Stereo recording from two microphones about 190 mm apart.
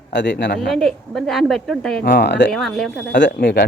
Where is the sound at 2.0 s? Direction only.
60° left (ahead or behind).